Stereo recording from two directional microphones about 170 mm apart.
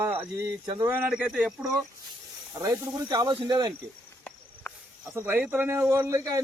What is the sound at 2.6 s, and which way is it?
Speech, 25° right (ahead or behind).